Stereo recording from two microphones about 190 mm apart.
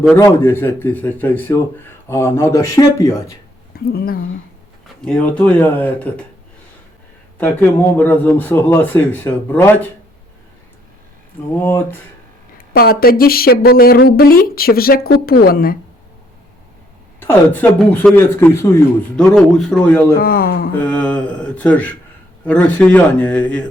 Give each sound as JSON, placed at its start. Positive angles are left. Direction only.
{"t": 0.2, "sound": "a man's voice", "side_deg": 15}
{"t": 3.7, "sound": "speech", "side_deg": 50}
{"t": 5.0, "sound": "a man's voice", "side_deg": 5}
{"t": 7.3, "sound": "a man's voice", "side_deg": 10}
{"t": 11.6, "sound": "a man's voice", "side_deg": 10}
{"t": 12.5, "sound": "speech", "side_deg": 50}
{"t": 17.2, "sound": "a man's voice", "side_deg": 10}
{"t": 19.3, "sound": "a man's voice", "side_deg": 0}
{"t": 20.1, "sound": "speech", "side_deg": 50}
{"t": 20.7, "sound": "a man's voice", "side_deg": 5}